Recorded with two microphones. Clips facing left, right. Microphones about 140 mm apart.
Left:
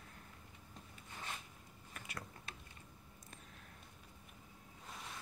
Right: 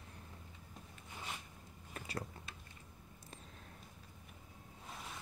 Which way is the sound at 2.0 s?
30° right (ahead or behind).